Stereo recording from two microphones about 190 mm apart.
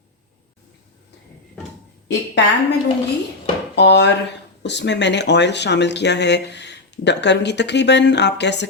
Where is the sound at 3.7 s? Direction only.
65° left (ahead or behind).